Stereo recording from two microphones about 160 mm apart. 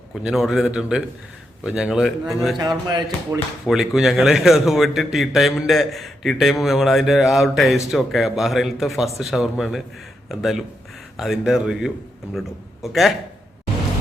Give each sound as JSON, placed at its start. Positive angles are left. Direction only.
{"t": 0.1, "sound": "a man's voice", "side_deg": -5}
{"t": 3.3, "sound": "speech", "side_deg": -20}
{"t": 3.7, "sound": "a man's voice", "side_deg": 0}